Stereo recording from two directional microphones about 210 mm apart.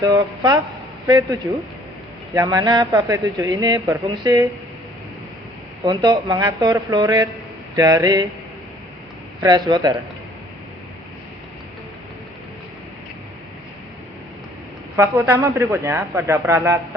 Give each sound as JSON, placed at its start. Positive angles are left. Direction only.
{"t": 0.0, "sound": "speech", "side_deg": -20}
{"t": 5.8, "sound": "speech", "side_deg": -20}
{"t": 9.4, "sound": "speech", "side_deg": -20}
{"t": 14.9, "sound": "speech", "side_deg": -10}